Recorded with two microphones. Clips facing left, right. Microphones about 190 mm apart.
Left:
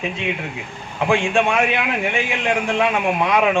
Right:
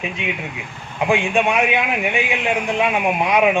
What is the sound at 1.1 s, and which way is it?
A man's voice, 15° right (ahead or behind).